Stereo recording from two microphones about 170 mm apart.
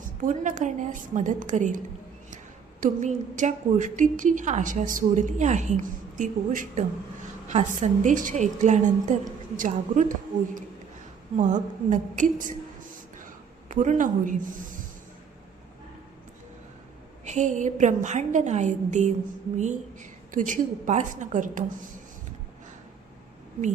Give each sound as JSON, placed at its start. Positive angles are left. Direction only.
{"t": 0.2, "sound": "a woman's voice", "side_deg": -50}
{"t": 2.8, "sound": "a woman's voice", "side_deg": -45}
{"t": 13.7, "sound": "a woman's voice", "side_deg": -50}
{"t": 17.2, "sound": "a woman's voice", "side_deg": -45}